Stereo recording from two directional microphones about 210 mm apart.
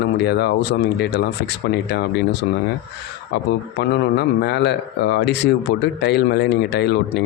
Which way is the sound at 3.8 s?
50° left (ahead or behind).